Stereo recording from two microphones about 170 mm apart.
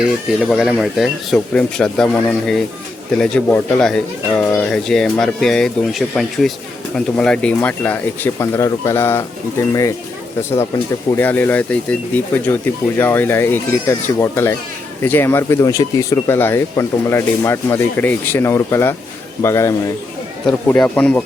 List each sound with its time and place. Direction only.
0.3 s speech: centre (ahead or behind); by 9.9 s 15° left (ahead or behind)
11.2 s speech: 10° left (ahead or behind)